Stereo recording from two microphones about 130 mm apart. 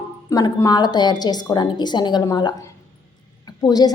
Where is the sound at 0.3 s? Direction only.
30° left (ahead or behind).